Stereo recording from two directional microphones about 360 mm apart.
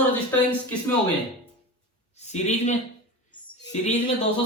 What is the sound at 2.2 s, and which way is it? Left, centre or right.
Speech, centre.